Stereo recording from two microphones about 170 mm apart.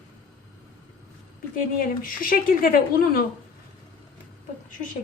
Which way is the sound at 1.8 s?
55° left (ahead or behind).